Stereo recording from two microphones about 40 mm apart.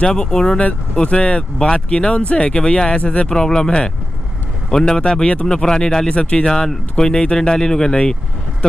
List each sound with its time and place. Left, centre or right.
0.0 s speech: centre
0.6 s speech: left
3.3 s speech: centre